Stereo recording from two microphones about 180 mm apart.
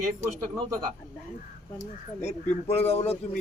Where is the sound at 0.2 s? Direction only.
15° right (ahead or behind).